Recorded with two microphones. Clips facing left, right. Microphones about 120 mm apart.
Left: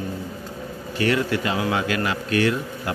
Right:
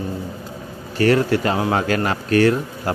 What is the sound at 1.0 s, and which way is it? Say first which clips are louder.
Speech: right 5 dB; 40° right (ahead or behind).